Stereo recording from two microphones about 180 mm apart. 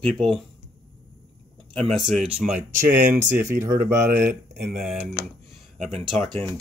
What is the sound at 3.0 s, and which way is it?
Speech, 45° right (ahead or behind).